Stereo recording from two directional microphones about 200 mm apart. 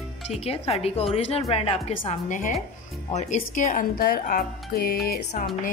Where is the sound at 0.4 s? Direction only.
30° left (ahead or behind).